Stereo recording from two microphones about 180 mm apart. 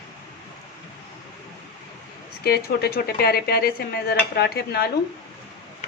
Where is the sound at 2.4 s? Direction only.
60° left (ahead or behind).